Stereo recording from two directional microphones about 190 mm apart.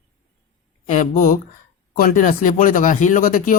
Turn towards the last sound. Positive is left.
turn(degrees=45)  # may be behind; listen again after turning